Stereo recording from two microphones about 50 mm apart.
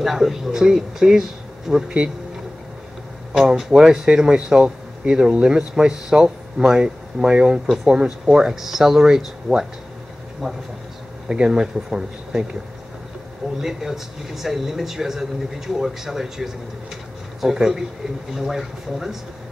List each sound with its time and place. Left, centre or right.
0.0 s speech: centre
3.3 s speech: centre
7.6 s speech: centre
13.6 s speech: centre